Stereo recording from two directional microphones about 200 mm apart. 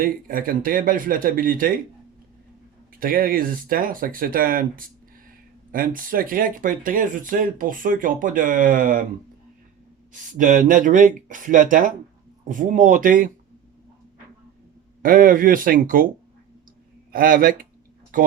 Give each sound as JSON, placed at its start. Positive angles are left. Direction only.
{"t": 0.0, "sound": "speech", "side_deg": -45}
{"t": 3.0, "sound": "speech", "side_deg": -45}
{"t": 10.1, "sound": "speech", "side_deg": -40}
{"t": 15.0, "sound": "speech", "side_deg": -45}
{"t": 17.1, "sound": "speech", "side_deg": -45}